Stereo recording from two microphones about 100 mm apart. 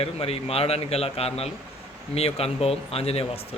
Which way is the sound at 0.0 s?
80° left.